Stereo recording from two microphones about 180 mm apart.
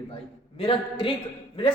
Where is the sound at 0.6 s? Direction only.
30° left (ahead or behind).